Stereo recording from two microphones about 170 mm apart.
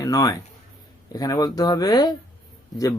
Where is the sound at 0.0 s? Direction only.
20° left (ahead or behind).